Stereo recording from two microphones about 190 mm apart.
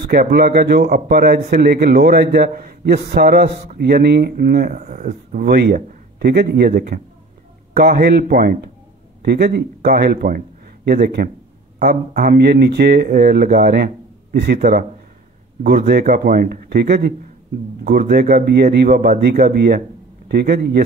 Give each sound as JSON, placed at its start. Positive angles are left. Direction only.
{"t": 0.1, "sound": "a man's voice", "side_deg": -55}